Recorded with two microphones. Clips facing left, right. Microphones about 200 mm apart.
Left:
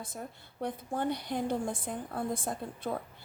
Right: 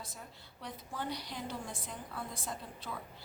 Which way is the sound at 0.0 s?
50° left (ahead or behind).